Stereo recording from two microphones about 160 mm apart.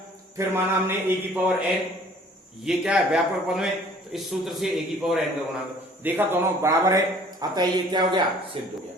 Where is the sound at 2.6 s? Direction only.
5° right (ahead or behind).